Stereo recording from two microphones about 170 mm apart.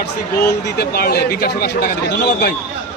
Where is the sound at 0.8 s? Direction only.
65° left (ahead or behind).